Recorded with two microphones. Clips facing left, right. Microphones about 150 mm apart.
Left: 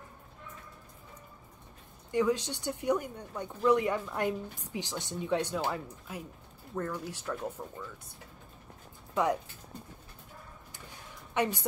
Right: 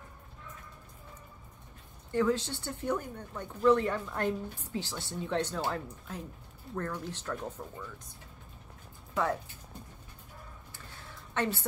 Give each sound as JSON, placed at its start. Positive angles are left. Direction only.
{"t": 2.0, "sound": "speech", "side_deg": 15}
{"t": 9.1, "sound": "speech", "side_deg": 15}
{"t": 10.7, "sound": "a sound", "side_deg": 15}